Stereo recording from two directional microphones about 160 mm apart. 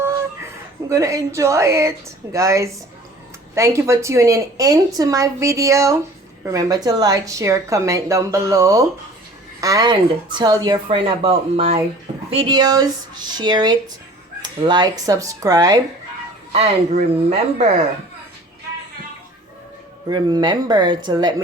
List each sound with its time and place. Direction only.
0.9 s speech: 20° right (ahead or behind)
16.5 s speech: 40° right (ahead or behind)
20.1 s speech: 25° right (ahead or behind)